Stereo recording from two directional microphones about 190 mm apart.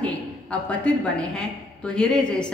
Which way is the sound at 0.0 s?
5° left (ahead or behind).